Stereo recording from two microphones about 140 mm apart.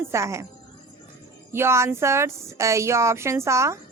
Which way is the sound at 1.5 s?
20° right (ahead or behind).